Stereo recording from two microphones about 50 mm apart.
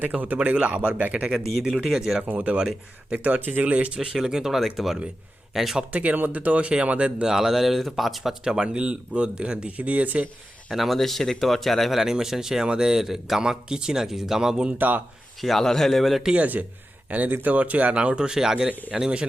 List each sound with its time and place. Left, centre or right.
0.0 s speech: right
0.5 s speech: right
1.5 s speech: centre
2.2 s speech: right; by 5.8 s centre
5.9 s speech: right
7.3 s speech: centre
8.6 s speech: right
10.7 s speech: centre
14.8 s speech: right
15.4 s speech: centre
16.3 s speech: right; by 19.2 s centre